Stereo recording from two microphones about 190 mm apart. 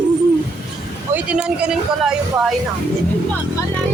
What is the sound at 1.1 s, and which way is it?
Speech, 5° right (ahead or behind).